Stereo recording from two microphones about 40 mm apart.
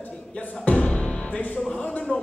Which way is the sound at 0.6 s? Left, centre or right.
Left.